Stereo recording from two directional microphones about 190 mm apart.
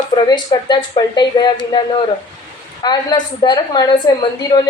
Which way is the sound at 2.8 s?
20° left (ahead or behind).